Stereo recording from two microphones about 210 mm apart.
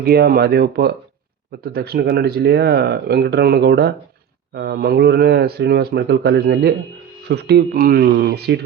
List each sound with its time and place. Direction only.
0.0 s speech: 50° right (ahead or behind)